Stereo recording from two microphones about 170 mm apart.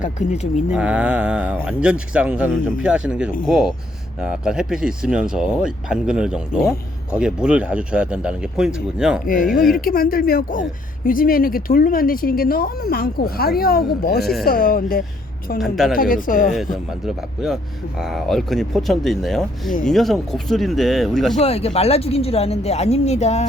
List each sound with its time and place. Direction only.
0.0 s speech: 45° left (ahead or behind)
0.7 s speech: 5° right (ahead or behind)
9.2 s speech: 55° left (ahead or behind)
15.6 s speech: centre (ahead or behind)
16.0 s speech: 55° left (ahead or behind)
17.1 s speech: centre (ahead or behind)
21.3 s speech: 35° left (ahead or behind)